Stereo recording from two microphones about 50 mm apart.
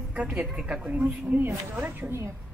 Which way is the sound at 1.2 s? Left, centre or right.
Right.